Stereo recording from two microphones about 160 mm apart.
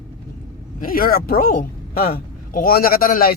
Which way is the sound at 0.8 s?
65° left (ahead or behind).